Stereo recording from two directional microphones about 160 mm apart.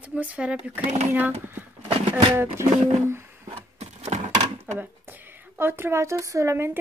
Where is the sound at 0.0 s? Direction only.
10° right (ahead or behind).